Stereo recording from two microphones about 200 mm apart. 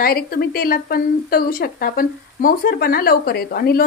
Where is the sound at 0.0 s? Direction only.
50° left (ahead or behind).